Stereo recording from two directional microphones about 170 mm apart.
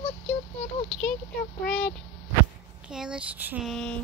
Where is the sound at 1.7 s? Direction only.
5° left (ahead or behind).